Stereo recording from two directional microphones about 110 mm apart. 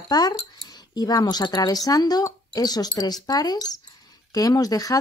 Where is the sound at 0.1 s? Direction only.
40° left (ahead or behind).